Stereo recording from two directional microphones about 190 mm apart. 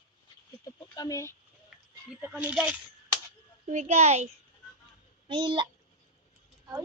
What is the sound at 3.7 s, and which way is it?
Speech, 40° right (ahead or behind).